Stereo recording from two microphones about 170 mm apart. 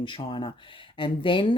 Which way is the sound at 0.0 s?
30° left (ahead or behind).